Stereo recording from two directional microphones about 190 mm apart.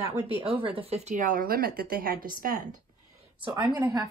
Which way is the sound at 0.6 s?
30° right (ahead or behind).